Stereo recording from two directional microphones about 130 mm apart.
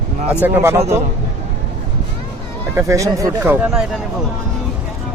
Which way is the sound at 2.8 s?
25° right (ahead or behind).